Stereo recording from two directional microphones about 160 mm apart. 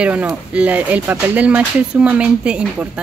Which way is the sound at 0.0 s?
10° right (ahead or behind).